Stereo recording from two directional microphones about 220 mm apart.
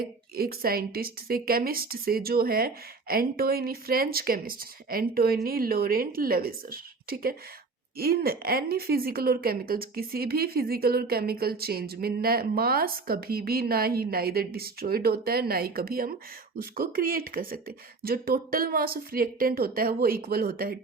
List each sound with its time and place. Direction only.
0.0 s speech: 45° right (ahead or behind)